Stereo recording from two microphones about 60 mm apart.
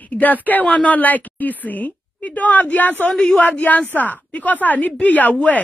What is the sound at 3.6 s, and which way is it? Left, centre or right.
Speech, left.